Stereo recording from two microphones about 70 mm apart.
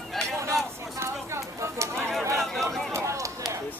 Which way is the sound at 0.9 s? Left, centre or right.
Right.